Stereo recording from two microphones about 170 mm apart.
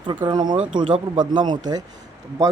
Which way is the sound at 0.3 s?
25° right (ahead or behind).